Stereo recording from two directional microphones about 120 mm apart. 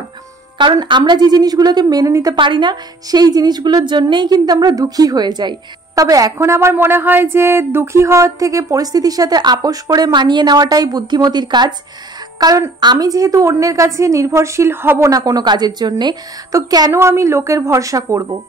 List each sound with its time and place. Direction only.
0.6 s a woman's voice: 40° right (ahead or behind)
2.3 s a woman's voice: 45° right (ahead or behind)
16.9 s a woman's voice: 20° right (ahead or behind)